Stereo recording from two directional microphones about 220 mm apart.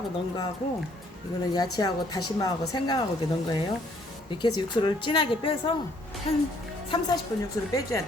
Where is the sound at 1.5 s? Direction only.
15° left (ahead or behind).